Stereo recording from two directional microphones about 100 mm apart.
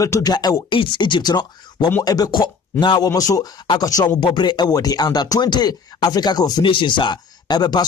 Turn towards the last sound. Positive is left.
turn(degrees=45)  # may be behind; listen again after turning